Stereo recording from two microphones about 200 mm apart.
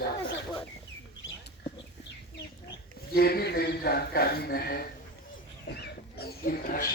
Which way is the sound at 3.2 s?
50° left (ahead or behind).